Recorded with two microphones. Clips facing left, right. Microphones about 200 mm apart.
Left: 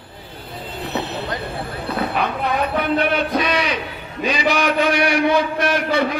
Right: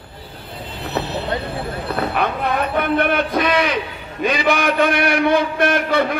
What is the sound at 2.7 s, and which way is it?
A man's voice, 55° right (ahead or behind).